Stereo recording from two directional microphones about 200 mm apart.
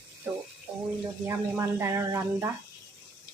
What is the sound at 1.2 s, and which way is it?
Speech, 15° right (ahead or behind).